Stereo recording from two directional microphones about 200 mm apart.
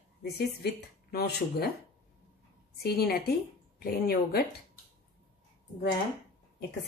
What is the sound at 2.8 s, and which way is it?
Speech, 50° left (ahead or behind).